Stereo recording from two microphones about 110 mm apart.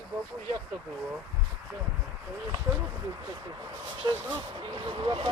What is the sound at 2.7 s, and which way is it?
Speech, 25° right (ahead or behind).